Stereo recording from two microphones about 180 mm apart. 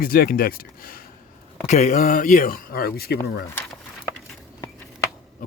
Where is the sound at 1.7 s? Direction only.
40° left (ahead or behind).